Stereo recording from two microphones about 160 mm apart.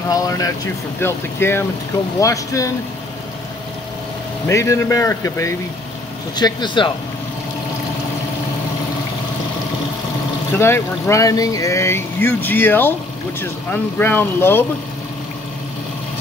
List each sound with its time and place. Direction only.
0.1 s a man's voice: 20° left (ahead or behind)
4.5 s a man's voice: 15° left (ahead or behind)
10.5 s speech: 15° left (ahead or behind)